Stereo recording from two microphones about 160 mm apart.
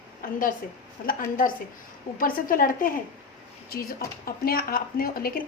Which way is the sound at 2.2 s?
60° left (ahead or behind).